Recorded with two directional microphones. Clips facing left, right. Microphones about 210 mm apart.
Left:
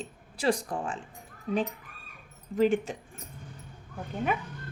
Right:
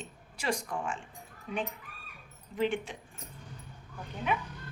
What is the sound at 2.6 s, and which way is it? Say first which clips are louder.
Speech: left 6 dB; 40° left (ahead or behind).